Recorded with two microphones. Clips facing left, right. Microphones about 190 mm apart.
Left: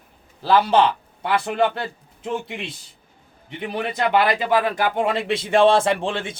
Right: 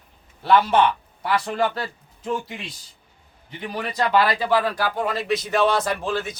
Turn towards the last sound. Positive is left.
turn(degrees=25)  # may be behind; listen again after turning